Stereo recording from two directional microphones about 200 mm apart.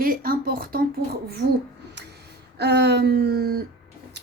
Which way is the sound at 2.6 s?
55° right (ahead or behind).